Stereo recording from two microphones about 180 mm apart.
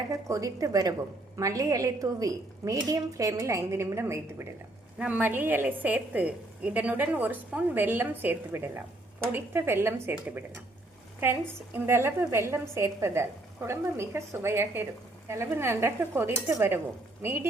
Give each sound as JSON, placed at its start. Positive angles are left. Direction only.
{"t": 0.1, "sound": "a woman's voice", "side_deg": -15}